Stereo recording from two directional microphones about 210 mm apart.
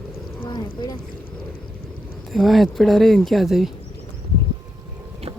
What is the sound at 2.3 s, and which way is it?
Speech, centre (ahead or behind).